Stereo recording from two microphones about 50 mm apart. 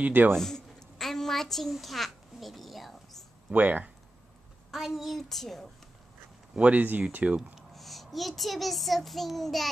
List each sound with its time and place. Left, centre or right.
0.0 s speech: right
0.4 s a sound: centre
3.5 s speech: right
4.6 s a child's voice: centre
6.5 s speech: right
7.7 s child singing: centre